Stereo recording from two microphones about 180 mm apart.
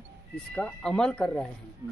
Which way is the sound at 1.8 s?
20° right (ahead or behind).